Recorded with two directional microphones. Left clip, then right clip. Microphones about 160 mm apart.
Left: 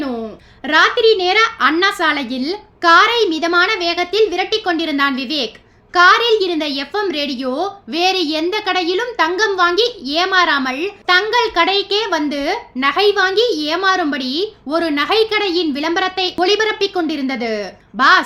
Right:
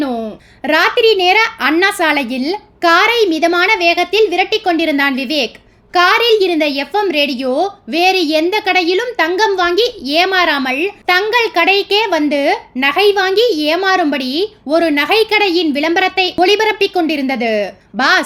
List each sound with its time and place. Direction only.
0.6 s a child's voice: 30° right (ahead or behind)